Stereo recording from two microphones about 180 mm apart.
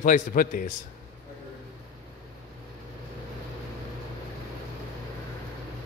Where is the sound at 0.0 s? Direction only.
45° left (ahead or behind).